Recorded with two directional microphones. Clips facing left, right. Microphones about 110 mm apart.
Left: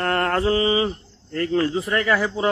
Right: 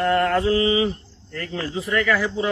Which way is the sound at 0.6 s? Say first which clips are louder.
Even; 35° left (ahead or behind).